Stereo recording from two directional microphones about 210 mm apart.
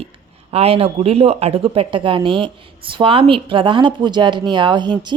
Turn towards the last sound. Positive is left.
turn(degrees=-20)  # may be behind; listen again after turning